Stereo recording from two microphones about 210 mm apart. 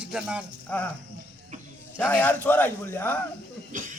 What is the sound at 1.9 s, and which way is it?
Speech, 5° left (ahead or behind).